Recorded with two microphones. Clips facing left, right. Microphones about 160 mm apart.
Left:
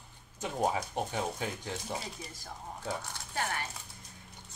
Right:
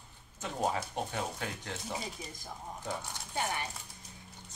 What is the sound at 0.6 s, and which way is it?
Speech, 15° left (ahead or behind).